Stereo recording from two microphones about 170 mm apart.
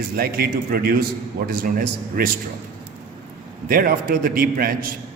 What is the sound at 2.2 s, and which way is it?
Speech, 60° right (ahead or behind).